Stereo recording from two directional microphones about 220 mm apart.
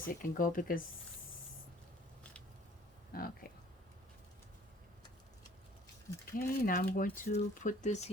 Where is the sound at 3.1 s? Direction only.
40° left (ahead or behind).